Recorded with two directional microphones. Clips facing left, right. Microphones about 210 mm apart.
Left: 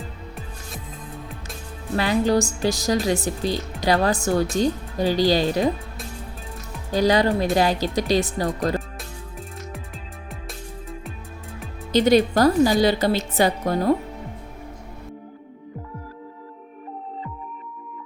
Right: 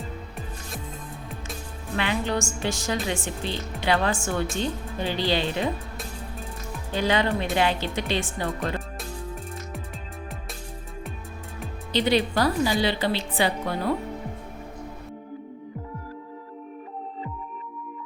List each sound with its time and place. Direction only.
2.0 s speech: 35° left (ahead or behind)
6.9 s speech: 40° left (ahead or behind)
11.9 s a woman's voice: 45° left (ahead or behind)